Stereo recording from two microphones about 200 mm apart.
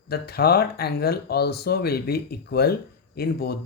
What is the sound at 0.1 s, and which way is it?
Speech, 50° left (ahead or behind).